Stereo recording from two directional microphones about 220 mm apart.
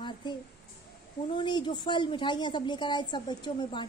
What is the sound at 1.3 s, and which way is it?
A woman's voice, 20° left (ahead or behind).